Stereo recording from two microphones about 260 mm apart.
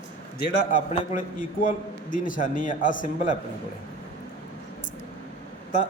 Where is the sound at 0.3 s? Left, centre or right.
Left.